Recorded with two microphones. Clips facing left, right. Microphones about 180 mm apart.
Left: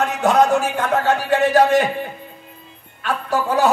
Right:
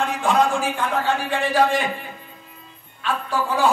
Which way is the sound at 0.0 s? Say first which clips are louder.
Left 4 dB; 40° left (ahead or behind).